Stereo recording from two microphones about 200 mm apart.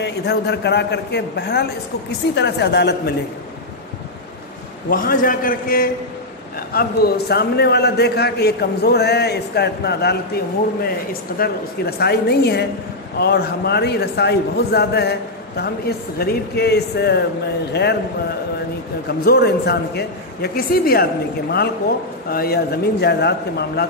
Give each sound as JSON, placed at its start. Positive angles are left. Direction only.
{"t": 0.0, "sound": "a woman's voice", "side_deg": 55}
{"t": 4.8, "sound": "a man's voice", "side_deg": 45}
{"t": 19.0, "sound": "a man's voice", "side_deg": 50}